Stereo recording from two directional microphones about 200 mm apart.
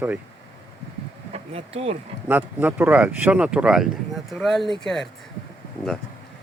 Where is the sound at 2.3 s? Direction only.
10° right (ahead or behind).